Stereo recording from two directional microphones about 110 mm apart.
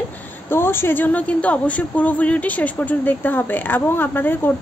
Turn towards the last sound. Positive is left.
turn(degrees=20)  # may be behind; listen again after turning